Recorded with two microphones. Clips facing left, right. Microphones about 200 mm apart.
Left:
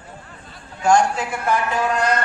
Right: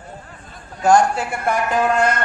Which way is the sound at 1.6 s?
50° right (ahead or behind).